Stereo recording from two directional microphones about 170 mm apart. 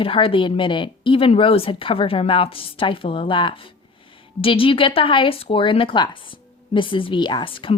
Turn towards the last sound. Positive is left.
turn(degrees=30)  # may be behind; listen again after turning